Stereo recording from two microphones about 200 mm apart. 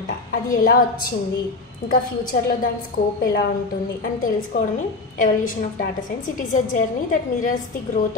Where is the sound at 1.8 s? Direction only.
45° left (ahead or behind).